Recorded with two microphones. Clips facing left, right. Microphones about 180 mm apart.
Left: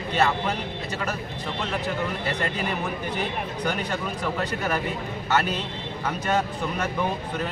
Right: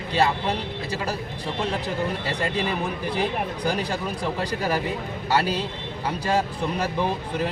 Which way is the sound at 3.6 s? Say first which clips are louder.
Even; 35° right (ahead or behind).